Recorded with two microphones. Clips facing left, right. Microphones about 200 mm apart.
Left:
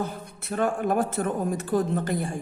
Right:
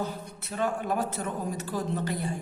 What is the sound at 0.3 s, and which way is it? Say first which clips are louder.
A man's voice: left 5 dB; 50° left (ahead or behind).